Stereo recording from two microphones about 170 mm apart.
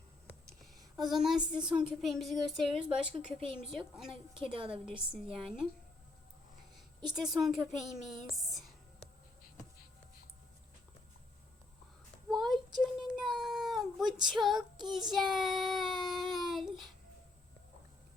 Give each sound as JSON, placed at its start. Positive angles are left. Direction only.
{"t": 0.8, "sound": "a sound", "side_deg": -25}
{"t": 1.1, "sound": "a woman's voice", "side_deg": 0}
{"t": 4.5, "sound": "a woman's voice", "side_deg": -30}
{"t": 4.9, "sound": "a woman's voice", "side_deg": -5}
{"t": 7.2, "sound": "a woman's voice", "side_deg": 0}
{"t": 12.3, "sound": "child singing", "side_deg": 0}
{"t": 13.1, "sound": "cat", "side_deg": 0}
{"t": 14.3, "sound": "a woman's voice", "side_deg": 0}
{"t": 14.8, "sound": "child singing", "side_deg": 0}